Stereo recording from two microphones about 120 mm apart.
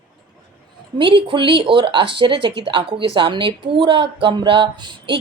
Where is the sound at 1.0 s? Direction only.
45° right (ahead or behind).